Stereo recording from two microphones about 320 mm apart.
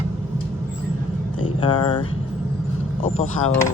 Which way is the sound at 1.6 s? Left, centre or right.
Centre.